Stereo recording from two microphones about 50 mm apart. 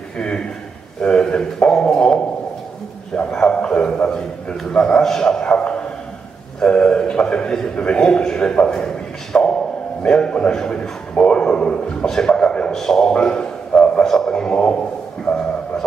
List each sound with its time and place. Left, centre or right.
0.2 s a man's voice: centre
1.0 s a sound: centre
3.3 s a man's voice: centre
13.7 s a sound: centre
14.0 s a man's voice: centre
14.3 s a man's voice: centre